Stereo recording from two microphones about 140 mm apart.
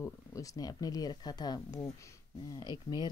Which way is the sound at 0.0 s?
25° left (ahead or behind).